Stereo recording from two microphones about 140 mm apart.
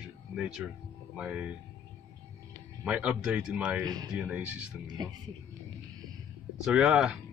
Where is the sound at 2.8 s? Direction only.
5° right (ahead or behind).